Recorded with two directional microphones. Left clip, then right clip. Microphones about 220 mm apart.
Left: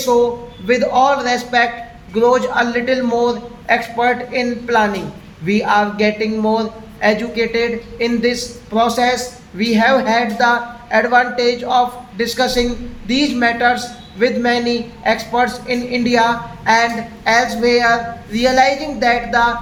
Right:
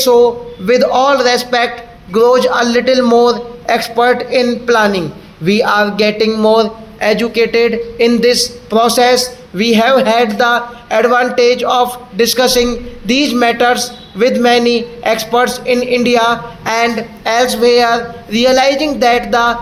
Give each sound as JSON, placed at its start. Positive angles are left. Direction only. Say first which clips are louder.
{"t": 0.6, "sound": "a man's voice", "louder": "right 3 dB", "side_deg": -45}